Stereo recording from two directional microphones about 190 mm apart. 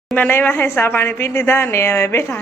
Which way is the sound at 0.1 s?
10° left (ahead or behind).